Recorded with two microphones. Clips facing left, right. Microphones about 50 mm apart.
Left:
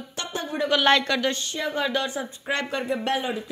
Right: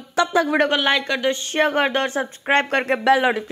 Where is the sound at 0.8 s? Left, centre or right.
Centre.